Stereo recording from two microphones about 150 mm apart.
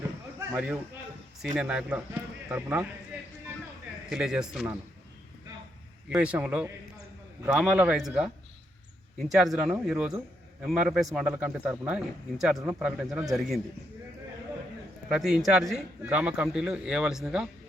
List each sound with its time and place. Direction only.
0.0 s a sound: 20° right (ahead or behind)
1.5 s a man's voice: 5° right (ahead or behind)
4.1 s a man's voice: 5° right (ahead or behind)
6.1 s a man's voice: 10° right (ahead or behind)
9.3 s a man's voice: centre (ahead or behind)
15.1 s a man's voice: 5° right (ahead or behind)